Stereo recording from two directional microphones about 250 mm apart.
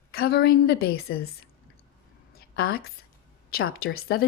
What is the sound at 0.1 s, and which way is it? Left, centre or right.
Speech, left.